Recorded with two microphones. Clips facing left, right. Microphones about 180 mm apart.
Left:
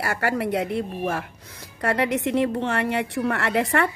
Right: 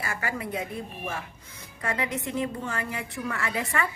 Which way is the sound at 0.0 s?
65° left (ahead or behind).